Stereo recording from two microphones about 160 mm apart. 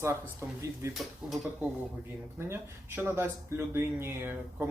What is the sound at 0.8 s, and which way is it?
Speech, 15° right (ahead or behind).